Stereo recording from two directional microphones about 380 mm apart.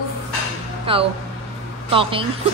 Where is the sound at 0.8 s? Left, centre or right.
Centre.